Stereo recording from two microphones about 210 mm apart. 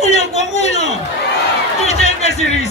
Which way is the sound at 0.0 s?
30° left (ahead or behind).